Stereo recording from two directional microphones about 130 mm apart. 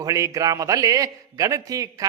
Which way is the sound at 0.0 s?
25° right (ahead or behind).